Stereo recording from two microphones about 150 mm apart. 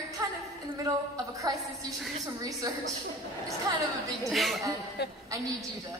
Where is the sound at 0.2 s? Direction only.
25° right (ahead or behind).